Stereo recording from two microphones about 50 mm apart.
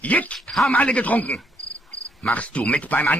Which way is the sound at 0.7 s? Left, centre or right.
Left.